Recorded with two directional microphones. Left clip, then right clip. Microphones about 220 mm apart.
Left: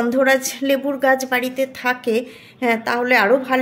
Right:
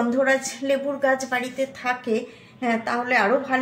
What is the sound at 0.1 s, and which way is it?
A woman's voice, 50° left (ahead or behind).